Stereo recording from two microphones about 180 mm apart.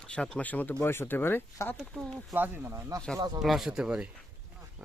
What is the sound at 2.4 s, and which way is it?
Speech, 15° right (ahead or behind).